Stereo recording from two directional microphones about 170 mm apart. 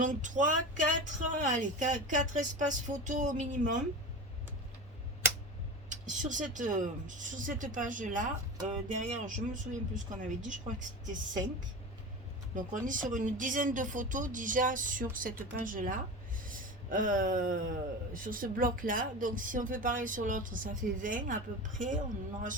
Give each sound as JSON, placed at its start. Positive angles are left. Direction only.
{"t": 0.0, "sound": "speech", "side_deg": -50}
{"t": 5.9, "sound": "speech", "side_deg": -50}
{"t": 12.5, "sound": "speech", "side_deg": -50}